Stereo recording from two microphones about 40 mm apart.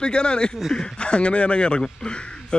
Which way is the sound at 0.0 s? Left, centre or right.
Left.